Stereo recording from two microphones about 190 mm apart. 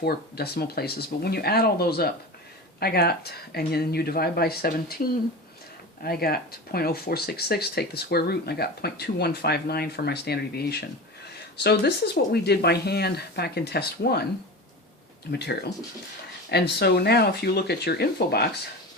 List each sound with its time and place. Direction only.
0.0 s speech: 55° left (ahead or behind)
15.3 s speech: 60° left (ahead or behind)